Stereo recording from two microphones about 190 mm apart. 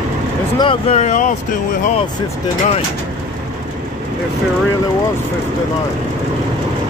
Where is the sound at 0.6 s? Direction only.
30° left (ahead or behind).